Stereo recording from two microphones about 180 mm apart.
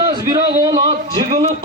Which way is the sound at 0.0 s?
20° right (ahead or behind).